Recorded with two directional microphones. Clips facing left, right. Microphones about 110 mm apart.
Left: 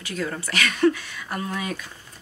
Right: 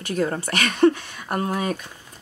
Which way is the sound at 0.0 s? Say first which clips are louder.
Right 5 dB; 45° right (ahead or behind).